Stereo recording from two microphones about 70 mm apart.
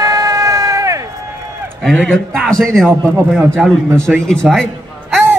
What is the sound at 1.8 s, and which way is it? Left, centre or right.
A man's voice, centre.